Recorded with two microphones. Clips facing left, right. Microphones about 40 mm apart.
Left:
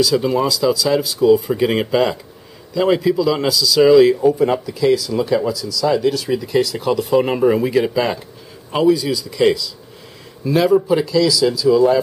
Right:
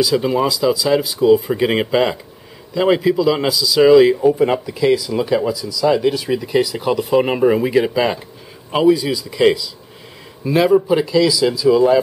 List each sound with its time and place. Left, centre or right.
0.0 s speech: centre